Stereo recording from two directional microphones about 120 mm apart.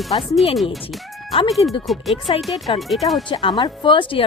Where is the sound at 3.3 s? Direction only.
45° left (ahead or behind).